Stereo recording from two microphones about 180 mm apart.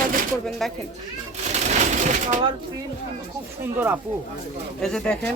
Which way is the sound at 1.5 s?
40° right (ahead or behind).